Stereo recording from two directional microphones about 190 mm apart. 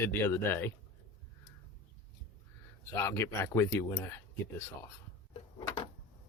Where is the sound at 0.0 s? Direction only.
15° left (ahead or behind).